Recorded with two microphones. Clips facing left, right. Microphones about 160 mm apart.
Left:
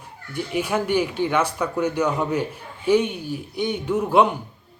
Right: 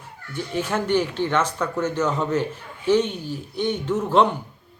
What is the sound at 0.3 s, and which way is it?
A man's voice, 10° left (ahead or behind).